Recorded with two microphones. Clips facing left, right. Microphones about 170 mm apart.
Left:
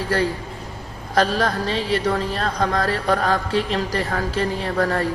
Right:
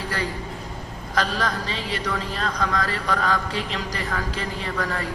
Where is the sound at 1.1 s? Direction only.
40° left (ahead or behind).